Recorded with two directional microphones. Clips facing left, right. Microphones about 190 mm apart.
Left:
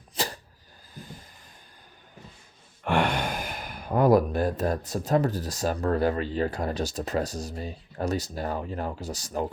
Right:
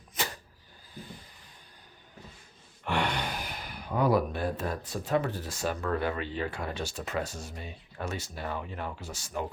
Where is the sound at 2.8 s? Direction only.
50° left (ahead or behind).